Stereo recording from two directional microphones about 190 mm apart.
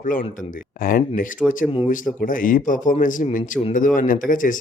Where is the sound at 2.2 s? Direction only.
45° left (ahead or behind).